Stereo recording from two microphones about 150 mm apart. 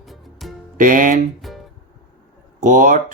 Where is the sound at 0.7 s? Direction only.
65° right (ahead or behind).